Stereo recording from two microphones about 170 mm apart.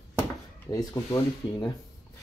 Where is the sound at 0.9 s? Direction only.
15° left (ahead or behind).